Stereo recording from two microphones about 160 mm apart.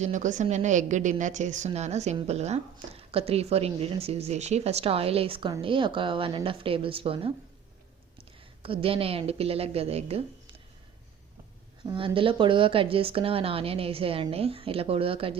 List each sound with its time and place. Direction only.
0.0 s a woman's voice: 50° right (ahead or behind)
8.6 s a woman's voice: 35° right (ahead or behind)
11.9 s a woman's voice: 35° right (ahead or behind)